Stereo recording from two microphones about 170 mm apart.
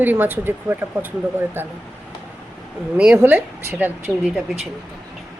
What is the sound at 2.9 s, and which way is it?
Speech, 5° right (ahead or behind).